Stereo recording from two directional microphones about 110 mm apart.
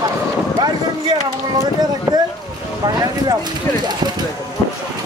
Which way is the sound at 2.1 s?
25° right (ahead or behind).